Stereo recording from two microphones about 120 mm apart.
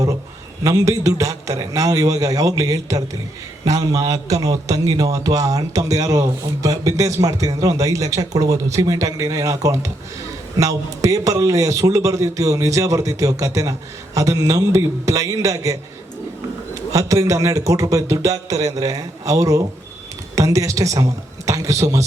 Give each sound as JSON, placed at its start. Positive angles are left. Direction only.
{"t": 0.6, "sound": "a man's voice", "side_deg": -30}
{"t": 16.9, "sound": "a man's voice", "side_deg": -25}